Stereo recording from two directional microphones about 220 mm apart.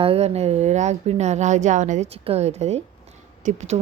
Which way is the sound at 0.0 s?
25° right (ahead or behind).